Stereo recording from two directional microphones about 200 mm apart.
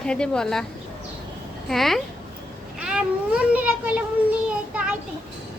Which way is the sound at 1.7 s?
Centre (ahead or behind).